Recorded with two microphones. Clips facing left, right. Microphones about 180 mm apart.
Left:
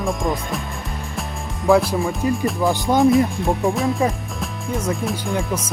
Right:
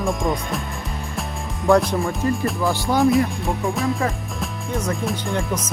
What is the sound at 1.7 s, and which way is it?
Music, centre (ahead or behind).